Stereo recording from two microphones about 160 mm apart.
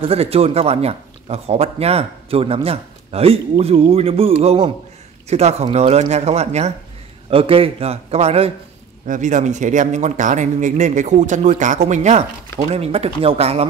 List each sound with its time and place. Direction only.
0.0 s speech: 40° right (ahead or behind)
9.0 s speech: 50° right (ahead or behind)